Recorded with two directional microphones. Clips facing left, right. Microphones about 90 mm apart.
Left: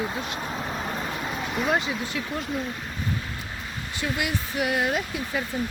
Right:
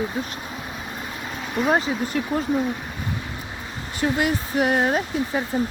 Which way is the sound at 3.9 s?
40° right (ahead or behind).